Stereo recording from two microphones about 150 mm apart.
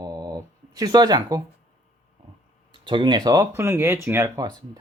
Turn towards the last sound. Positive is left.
turn(degrees=-20)  # may be behind; listen again after turning